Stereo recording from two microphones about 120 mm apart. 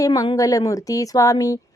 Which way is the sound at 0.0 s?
30° left (ahead or behind).